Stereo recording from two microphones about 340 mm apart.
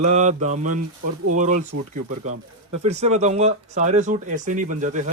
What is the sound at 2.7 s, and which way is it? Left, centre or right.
Speech, centre.